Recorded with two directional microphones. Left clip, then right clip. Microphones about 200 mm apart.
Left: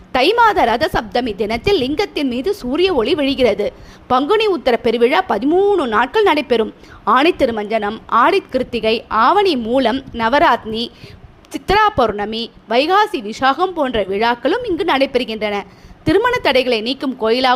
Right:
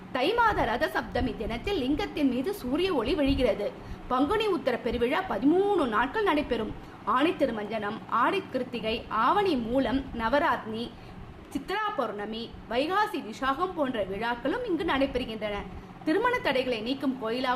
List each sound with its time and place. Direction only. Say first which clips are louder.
0.1 s a woman's voice: left 13 dB; 45° left (ahead or behind)